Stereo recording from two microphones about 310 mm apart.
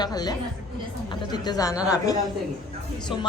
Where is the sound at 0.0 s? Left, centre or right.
Centre.